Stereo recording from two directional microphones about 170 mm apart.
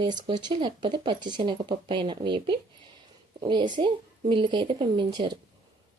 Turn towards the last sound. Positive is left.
turn(degrees=-25)  # may be behind; listen again after turning